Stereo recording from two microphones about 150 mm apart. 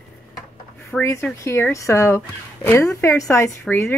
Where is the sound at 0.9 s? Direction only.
15° left (ahead or behind).